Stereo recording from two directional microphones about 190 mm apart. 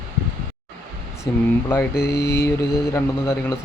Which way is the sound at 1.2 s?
15° left (ahead or behind).